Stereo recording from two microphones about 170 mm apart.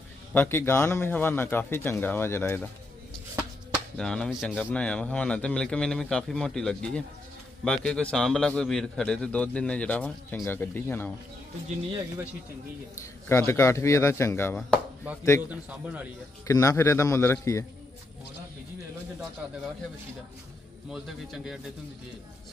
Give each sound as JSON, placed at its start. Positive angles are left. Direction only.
{"t": 0.3, "sound": "speech", "side_deg": 10}
{"t": 3.9, "sound": "a man's voice", "side_deg": 5}
{"t": 13.0, "sound": "speech", "side_deg": 15}
{"t": 16.4, "sound": "speech", "side_deg": 20}
{"t": 20.9, "sound": "a man's voice", "side_deg": 0}